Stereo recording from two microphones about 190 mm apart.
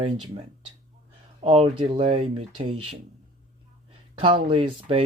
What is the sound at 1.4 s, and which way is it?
Speech, 30° right (ahead or behind).